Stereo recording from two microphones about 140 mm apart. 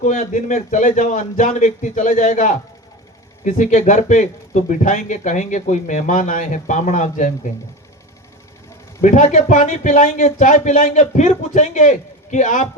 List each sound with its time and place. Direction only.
0.0 s speech: 60° left (ahead or behind)
9.0 s speech: 60° left (ahead or behind)